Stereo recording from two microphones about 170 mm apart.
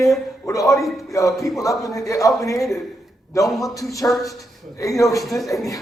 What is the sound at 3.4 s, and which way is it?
Speech, centre (ahead or behind).